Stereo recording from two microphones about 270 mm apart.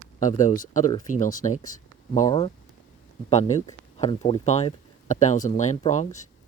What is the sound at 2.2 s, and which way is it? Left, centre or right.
Speech, centre.